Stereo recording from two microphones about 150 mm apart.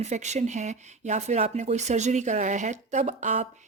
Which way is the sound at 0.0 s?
50° right (ahead or behind).